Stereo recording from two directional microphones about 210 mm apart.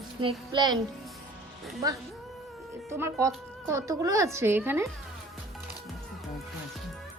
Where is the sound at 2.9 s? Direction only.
15° right (ahead or behind).